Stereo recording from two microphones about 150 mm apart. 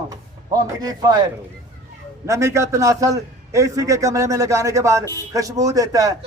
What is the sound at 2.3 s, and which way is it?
A man's voice, 20° right (ahead or behind).